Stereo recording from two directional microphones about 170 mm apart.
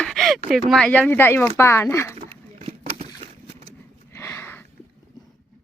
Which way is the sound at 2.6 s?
35° right (ahead or behind).